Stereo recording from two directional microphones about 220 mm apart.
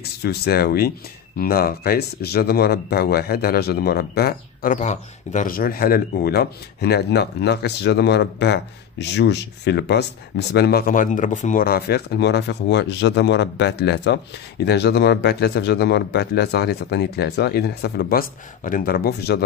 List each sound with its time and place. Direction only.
0.2 s speech: 45° left (ahead or behind)